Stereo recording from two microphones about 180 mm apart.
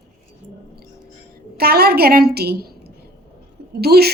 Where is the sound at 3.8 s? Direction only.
60° right (ahead or behind).